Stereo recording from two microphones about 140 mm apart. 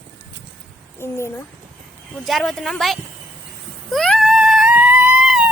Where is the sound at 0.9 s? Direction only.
20° left (ahead or behind).